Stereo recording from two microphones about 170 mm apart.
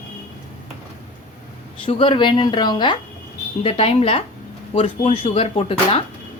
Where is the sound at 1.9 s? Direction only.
30° left (ahead or behind).